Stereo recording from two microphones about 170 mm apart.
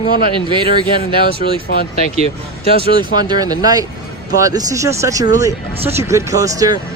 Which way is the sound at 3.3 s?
20° right (ahead or behind).